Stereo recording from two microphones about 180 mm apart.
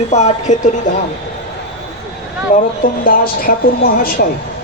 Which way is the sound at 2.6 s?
50° left (ahead or behind).